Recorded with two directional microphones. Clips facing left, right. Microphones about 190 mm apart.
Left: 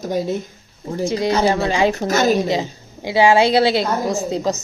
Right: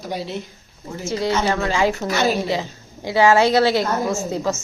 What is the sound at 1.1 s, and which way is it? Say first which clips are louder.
Speech: left 3 dB; 15° left (ahead or behind).